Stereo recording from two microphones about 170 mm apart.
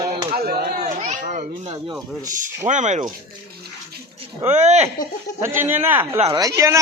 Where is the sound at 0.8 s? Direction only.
45° right (ahead or behind).